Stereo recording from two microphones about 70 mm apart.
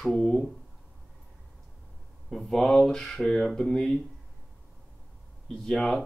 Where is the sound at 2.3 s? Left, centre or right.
Centre.